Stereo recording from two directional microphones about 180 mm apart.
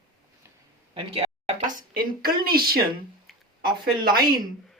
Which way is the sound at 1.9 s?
55° right (ahead or behind).